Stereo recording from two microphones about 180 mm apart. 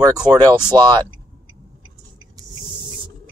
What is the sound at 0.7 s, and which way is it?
Speech, 25° right (ahead or behind).